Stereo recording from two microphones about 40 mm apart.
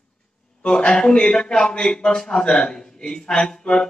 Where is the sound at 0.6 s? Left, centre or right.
Left.